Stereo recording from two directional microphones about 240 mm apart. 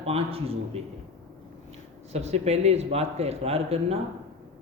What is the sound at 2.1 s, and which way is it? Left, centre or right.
A man's voice, right.